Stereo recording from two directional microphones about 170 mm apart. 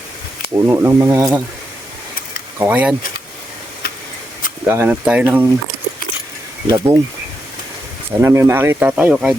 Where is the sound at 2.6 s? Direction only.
10° right (ahead or behind).